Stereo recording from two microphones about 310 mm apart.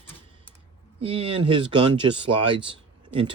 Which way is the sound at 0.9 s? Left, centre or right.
Centre.